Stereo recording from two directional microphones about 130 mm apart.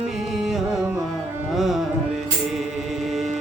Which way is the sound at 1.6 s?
Centre (ahead or behind).